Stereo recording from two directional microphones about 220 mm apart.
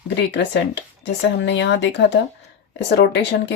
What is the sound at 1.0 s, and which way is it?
Speech, 55° left (ahead or behind).